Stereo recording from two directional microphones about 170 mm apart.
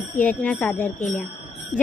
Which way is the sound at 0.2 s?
10° left (ahead or behind).